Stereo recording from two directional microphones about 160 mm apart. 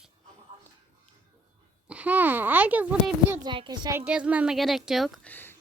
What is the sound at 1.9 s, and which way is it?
A child's voice, 10° right (ahead or behind).